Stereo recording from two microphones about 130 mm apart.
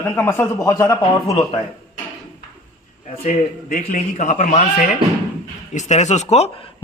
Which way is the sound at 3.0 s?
50° left (ahead or behind).